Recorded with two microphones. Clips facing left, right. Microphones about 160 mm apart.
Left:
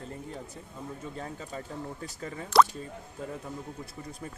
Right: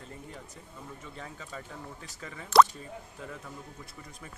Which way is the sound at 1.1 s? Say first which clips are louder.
Left 5 dB; 35° left (ahead or behind).